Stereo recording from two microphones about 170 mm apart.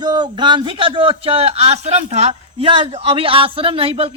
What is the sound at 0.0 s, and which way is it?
Speech, 25° right (ahead or behind).